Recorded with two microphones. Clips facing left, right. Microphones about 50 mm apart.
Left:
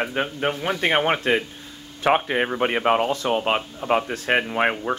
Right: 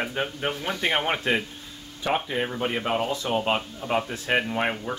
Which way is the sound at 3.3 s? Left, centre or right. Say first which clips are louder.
Left 3 dB; left.